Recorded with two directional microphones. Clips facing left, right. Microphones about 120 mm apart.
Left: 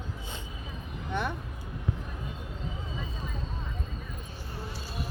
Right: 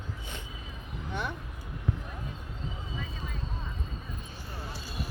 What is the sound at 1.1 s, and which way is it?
Speech, 55° left (ahead or behind).